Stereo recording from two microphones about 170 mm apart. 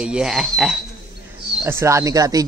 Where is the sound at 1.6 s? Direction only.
15° right (ahead or behind).